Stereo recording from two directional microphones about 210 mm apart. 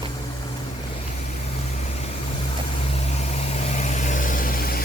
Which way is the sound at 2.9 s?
30° left (ahead or behind).